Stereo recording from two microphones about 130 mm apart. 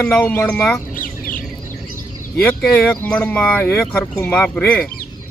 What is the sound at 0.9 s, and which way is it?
Bird, 90° left.